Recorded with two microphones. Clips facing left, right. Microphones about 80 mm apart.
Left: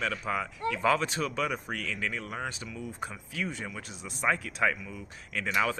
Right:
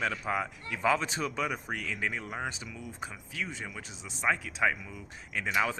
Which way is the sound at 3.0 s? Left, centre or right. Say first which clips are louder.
Left 2 dB; centre.